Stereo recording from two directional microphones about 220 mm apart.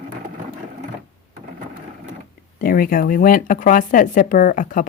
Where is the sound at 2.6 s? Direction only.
40° left (ahead or behind).